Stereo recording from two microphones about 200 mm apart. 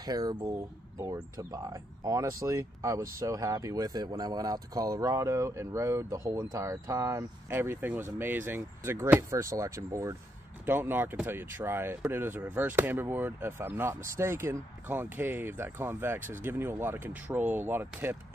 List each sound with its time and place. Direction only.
0.0 s speech: 20° right (ahead or behind)